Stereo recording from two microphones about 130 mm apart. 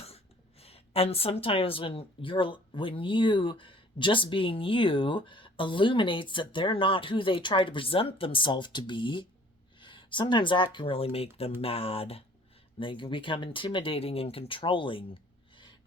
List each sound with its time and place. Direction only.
0.6 s speech: 50° left (ahead or behind)